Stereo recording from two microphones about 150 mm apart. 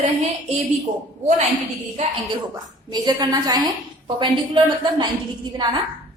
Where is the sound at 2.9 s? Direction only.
25° right (ahead or behind).